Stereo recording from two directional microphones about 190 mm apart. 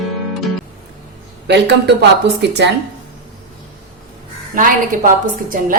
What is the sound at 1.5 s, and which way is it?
A man's voice, 60° right (ahead or behind).